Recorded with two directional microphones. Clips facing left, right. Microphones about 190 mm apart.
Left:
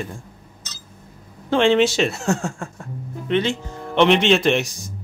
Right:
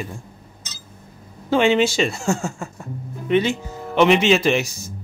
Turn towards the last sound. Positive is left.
turn(degrees=0)  # may be behind; listen again after turning